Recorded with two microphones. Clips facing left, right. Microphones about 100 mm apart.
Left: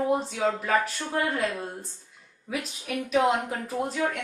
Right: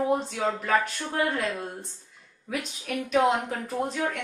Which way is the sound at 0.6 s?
Centre (ahead or behind).